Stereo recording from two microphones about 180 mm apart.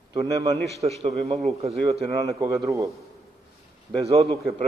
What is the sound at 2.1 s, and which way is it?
Speech, 20° right (ahead or behind).